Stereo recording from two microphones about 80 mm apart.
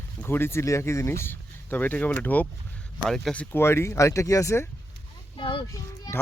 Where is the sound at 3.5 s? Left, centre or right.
Left.